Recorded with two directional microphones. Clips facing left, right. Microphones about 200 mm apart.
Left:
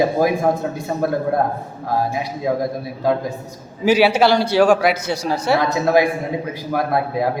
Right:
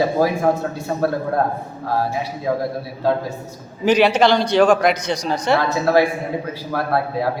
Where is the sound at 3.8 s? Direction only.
5° left (ahead or behind).